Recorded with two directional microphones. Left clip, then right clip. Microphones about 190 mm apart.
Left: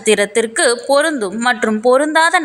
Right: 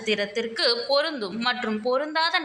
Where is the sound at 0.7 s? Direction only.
45° left (ahead or behind).